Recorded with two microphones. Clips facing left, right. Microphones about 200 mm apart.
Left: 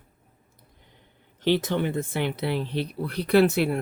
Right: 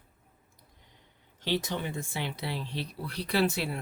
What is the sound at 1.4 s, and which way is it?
Speech, 60° left (ahead or behind).